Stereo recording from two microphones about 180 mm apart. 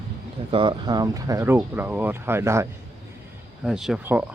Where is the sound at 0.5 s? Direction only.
25° right (ahead or behind).